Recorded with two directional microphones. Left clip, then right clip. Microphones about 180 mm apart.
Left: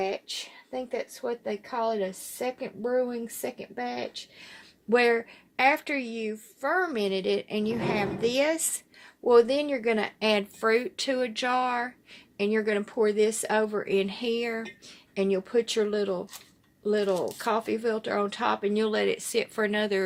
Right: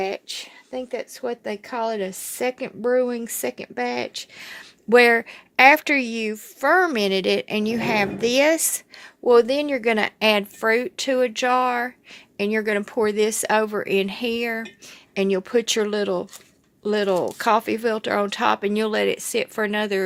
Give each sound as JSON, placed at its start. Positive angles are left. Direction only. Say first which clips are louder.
{"t": 0.0, "sound": "speech", "louder": "right 4 dB", "side_deg": -50}